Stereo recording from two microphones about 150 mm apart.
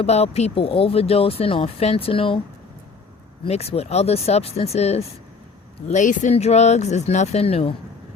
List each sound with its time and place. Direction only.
0.0 s speech: 45° left (ahead or behind)
3.4 s speech: 40° left (ahead or behind)
5.9 s speech: 55° left (ahead or behind)